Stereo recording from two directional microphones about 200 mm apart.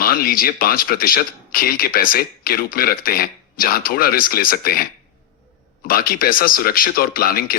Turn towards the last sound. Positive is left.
turn(degrees=50)  # may be behind; listen again after turning